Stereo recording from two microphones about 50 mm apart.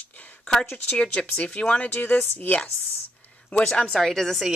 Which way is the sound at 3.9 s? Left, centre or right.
Centre.